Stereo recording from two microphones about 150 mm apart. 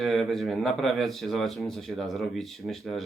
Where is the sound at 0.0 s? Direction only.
Centre (ahead or behind).